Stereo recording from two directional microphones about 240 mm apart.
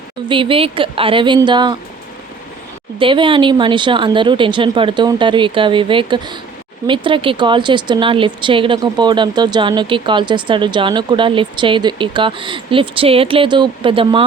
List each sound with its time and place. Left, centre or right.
0.3 s speech: right
3.0 s speech: right